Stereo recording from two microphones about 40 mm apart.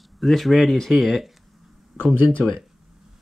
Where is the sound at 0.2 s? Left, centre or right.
Centre.